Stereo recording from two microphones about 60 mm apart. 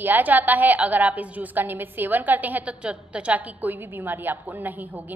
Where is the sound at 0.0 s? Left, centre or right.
Right.